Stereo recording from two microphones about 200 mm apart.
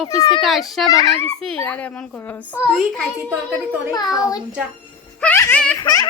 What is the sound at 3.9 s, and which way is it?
A child's voice, 20° left (ahead or behind).